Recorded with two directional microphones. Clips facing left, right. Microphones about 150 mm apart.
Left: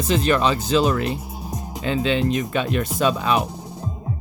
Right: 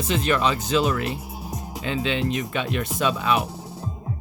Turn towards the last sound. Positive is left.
turn(degrees=35)  # may be behind; listen again after turning